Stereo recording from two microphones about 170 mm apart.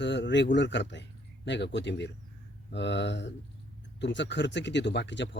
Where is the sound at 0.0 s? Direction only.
90° left.